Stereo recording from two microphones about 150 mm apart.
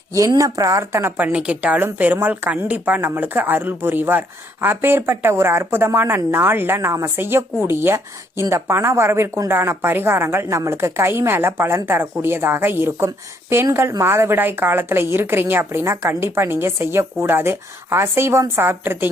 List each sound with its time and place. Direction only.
0.1 s a woman's voice: 20° right (ahead or behind)